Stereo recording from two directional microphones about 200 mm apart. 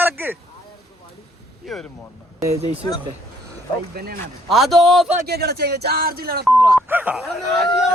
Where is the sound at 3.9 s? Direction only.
50° right (ahead or behind).